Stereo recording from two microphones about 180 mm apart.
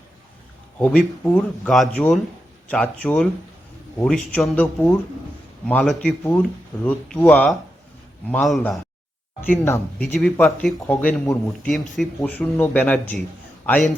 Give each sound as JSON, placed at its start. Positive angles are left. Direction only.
{"t": 0.8, "sound": "a man's voice", "side_deg": 5}
{"t": 9.5, "sound": "speech", "side_deg": 15}
{"t": 10.0, "sound": "a man's voice", "side_deg": 5}